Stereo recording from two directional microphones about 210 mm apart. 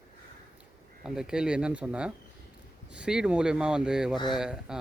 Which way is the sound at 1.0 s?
5° right (ahead or behind).